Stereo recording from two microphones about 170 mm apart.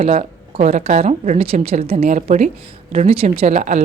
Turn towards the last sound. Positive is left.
turn(degrees=-45)  # may be behind; listen again after turning